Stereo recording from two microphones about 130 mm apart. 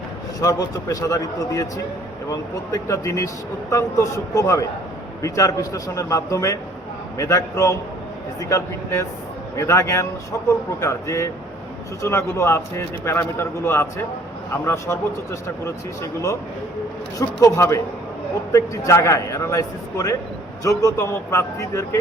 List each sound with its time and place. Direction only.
0.3 s speech: 25° left (ahead or behind)
17.2 s speech: 25° left (ahead or behind)